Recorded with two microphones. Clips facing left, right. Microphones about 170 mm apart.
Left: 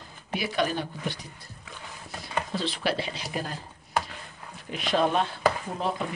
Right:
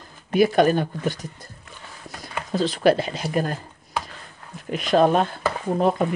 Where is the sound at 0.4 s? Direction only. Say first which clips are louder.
Right 11 dB; 50° right (ahead or behind).